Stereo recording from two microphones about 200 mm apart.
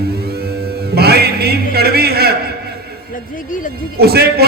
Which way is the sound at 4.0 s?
50° right (ahead or behind).